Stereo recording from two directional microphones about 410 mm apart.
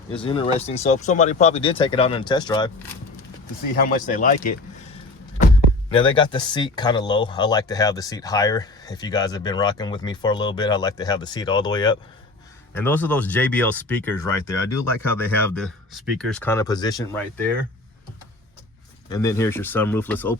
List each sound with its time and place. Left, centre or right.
0.1 s speech: centre
5.9 s speech: centre
19.0 s speech: centre